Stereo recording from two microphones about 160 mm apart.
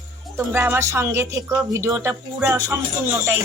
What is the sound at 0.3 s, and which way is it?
Speech, 15° right (ahead or behind).